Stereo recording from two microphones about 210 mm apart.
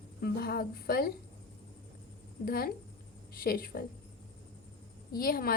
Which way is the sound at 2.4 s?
45° left (ahead or behind).